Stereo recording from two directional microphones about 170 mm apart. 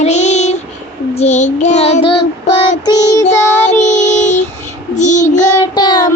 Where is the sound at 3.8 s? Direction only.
45° left (ahead or behind).